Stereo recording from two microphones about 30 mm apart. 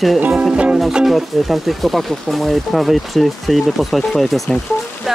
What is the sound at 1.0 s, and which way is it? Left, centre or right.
Speech, centre.